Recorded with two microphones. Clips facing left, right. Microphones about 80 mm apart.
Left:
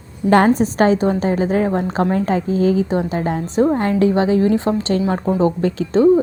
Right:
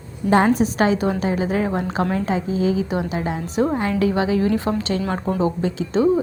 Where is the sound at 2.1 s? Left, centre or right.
Left.